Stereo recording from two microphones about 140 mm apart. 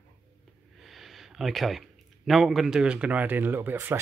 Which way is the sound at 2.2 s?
Centre (ahead or behind).